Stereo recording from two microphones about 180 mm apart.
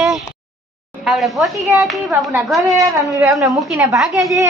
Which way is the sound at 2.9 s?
15° right (ahead or behind).